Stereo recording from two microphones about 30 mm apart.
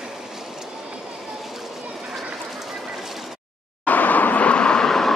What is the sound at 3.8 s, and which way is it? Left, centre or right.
Vehicle, left.